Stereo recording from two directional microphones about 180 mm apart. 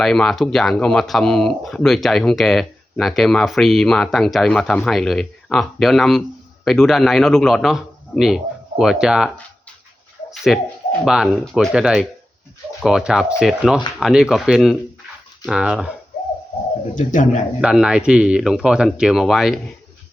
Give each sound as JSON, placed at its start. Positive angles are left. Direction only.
{"t": 0.0, "sound": "speech", "side_deg": 0}
{"t": 10.5, "sound": "speech", "side_deg": 0}
{"t": 16.9, "sound": "speech", "side_deg": 45}
{"t": 17.6, "sound": "speech", "side_deg": -5}